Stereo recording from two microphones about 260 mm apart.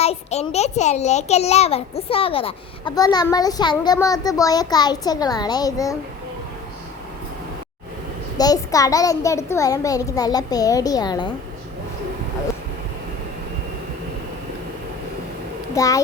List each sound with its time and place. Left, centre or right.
0.0 s a child's voice: left
8.4 s a child's voice: centre
15.7 s a child's voice: centre